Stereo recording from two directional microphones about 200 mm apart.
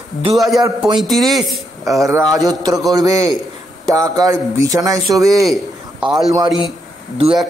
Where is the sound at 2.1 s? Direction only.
15° right (ahead or behind).